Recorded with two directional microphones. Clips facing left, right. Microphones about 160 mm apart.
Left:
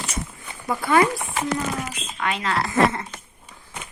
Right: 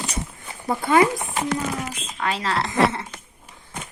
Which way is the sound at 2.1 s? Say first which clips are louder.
Even; 30° right (ahead or behind).